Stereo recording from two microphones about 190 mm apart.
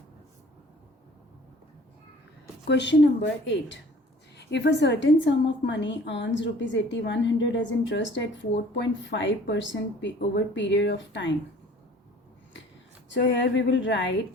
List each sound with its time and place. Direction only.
2.6 s a woman's voice: 65° left (ahead or behind)
13.1 s a woman's voice: 70° left (ahead or behind)